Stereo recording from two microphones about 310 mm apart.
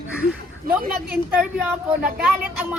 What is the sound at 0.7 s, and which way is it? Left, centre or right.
Speech, right.